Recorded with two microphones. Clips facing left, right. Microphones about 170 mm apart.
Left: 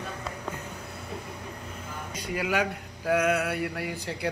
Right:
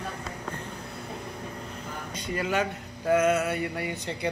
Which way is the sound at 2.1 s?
10° left (ahead or behind).